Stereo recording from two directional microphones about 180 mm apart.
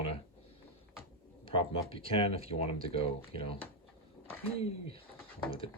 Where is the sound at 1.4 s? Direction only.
30° left (ahead or behind).